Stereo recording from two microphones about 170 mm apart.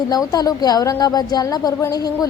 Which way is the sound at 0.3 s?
20° left (ahead or behind).